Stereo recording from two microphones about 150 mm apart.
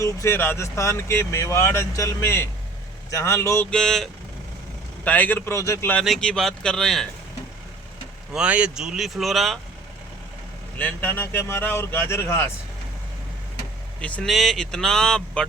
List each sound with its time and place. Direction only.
0.0 s speech: 20° left (ahead or behind)
3.7 s speech: 5° left (ahead or behind)
6.0 s speech: 5° left (ahead or behind)
8.3 s speech: 5° right (ahead or behind)
10.8 s speech: 10° left (ahead or behind)
14.0 s speech: 5° left (ahead or behind)